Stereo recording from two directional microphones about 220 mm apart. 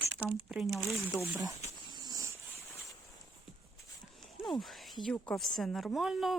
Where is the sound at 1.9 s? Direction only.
20° right (ahead or behind).